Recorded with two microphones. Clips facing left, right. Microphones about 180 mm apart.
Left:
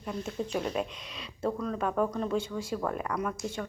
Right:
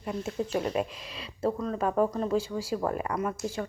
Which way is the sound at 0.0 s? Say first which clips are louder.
Right 2 dB; 5° right (ahead or behind).